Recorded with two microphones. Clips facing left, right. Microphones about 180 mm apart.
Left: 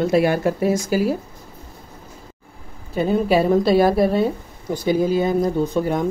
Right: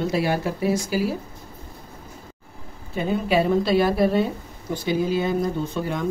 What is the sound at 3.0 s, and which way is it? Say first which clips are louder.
A woman's voice: left 4 dB; 40° left (ahead or behind).